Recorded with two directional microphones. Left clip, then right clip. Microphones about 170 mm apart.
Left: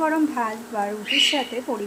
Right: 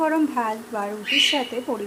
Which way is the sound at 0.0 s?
Centre (ahead or behind).